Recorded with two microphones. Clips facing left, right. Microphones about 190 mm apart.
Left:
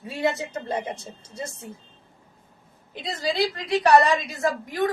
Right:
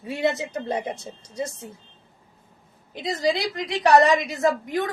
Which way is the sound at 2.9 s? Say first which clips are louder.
Right 3 dB; 20° right (ahead or behind).